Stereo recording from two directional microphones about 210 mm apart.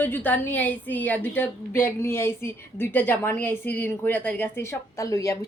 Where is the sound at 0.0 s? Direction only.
10° left (ahead or behind).